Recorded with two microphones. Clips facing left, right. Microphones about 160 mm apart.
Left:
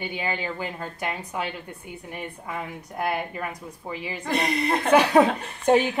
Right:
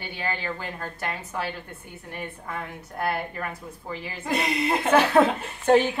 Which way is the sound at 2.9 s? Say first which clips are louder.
Left 1 dB; 10° left (ahead or behind).